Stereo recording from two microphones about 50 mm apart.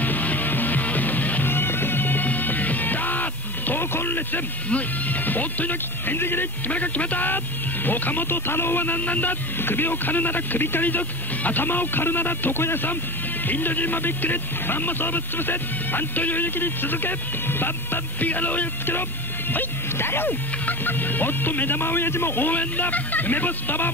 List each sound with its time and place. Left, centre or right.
0.0 s music: left
1.5 s music: left
4.6 s speech: left
6.7 s speech: left
19.5 s speech: left
20.6 s speech: left